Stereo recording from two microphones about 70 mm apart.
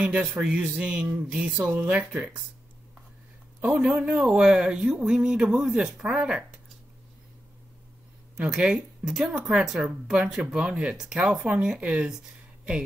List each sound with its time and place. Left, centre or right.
0.0 s speech: centre
1.0 s speech: right
3.6 s speech: centre
8.4 s speech: centre